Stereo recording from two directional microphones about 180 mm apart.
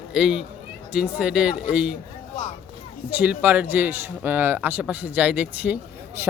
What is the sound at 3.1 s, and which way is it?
Speech, 10° right (ahead or behind).